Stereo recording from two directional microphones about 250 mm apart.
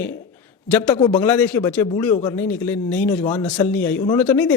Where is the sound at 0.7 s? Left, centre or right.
Centre.